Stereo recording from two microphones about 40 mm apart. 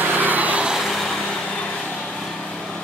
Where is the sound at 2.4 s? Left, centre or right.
Left.